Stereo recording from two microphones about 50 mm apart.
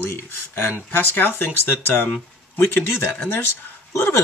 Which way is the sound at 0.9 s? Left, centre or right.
Left.